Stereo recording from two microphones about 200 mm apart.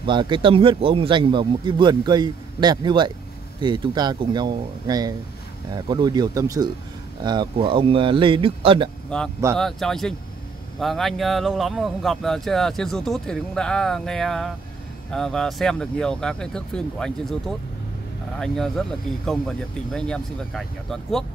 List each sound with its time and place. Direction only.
0.0 s speech: 25° right (ahead or behind)
9.6 s speech: centre (ahead or behind)